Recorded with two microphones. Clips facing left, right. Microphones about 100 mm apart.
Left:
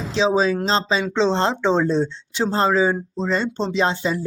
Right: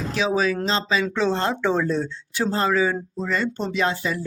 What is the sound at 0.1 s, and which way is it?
Speech, 25° left (ahead or behind).